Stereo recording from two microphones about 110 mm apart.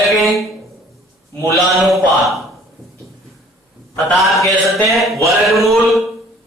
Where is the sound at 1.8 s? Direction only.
Centre (ahead or behind).